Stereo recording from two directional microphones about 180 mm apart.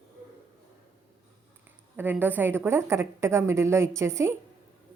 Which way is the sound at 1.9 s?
10° right (ahead or behind).